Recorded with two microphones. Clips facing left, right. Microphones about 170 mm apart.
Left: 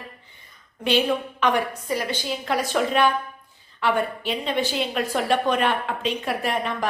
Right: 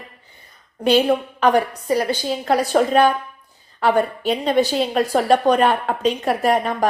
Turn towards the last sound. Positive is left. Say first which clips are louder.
# right 7 dB
turn(degrees=-40)  # may be behind; listen again after turning